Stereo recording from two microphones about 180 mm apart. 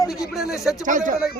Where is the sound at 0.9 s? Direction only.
45° right (ahead or behind).